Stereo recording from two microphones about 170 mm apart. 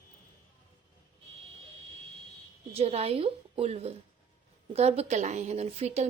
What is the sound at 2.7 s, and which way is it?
A woman's voice, 35° right (ahead or behind).